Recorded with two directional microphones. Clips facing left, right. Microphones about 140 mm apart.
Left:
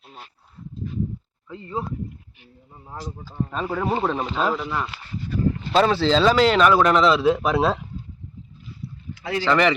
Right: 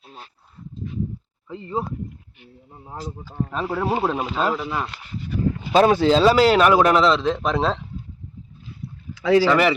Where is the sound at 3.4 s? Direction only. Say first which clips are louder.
Right 1 dB; 5° right (ahead or behind).